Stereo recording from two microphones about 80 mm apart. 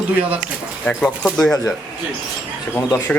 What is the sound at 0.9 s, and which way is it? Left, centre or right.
Speech, centre.